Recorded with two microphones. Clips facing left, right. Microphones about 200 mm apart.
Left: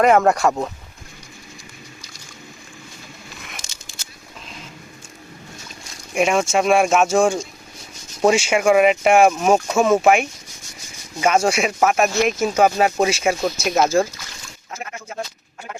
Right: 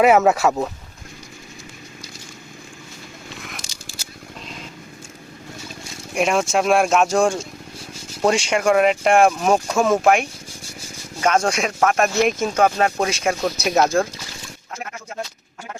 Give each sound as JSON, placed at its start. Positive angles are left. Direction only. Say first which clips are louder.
{"t": 0.0, "sound": "speech", "louder": "even", "side_deg": -5}
{"t": 6.1, "sound": "speech", "louder": "left 1 dB", "side_deg": 0}